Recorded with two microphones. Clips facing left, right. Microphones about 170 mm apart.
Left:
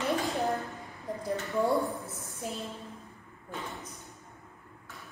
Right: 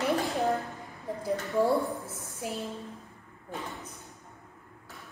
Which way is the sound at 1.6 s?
Centre (ahead or behind).